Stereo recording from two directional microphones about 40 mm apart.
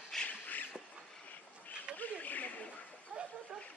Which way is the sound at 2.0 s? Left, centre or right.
Left.